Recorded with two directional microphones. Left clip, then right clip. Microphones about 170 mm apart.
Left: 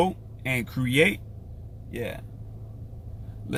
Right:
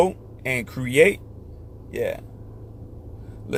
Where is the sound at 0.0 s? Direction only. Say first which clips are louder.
Right 5 dB; 15° left (ahead or behind).